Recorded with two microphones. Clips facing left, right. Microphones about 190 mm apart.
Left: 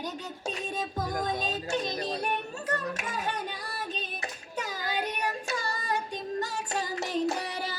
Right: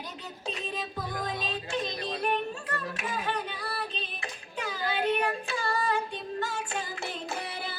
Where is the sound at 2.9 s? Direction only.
45° left (ahead or behind).